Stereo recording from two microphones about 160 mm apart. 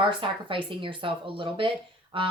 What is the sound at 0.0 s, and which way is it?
Speech, 30° right (ahead or behind).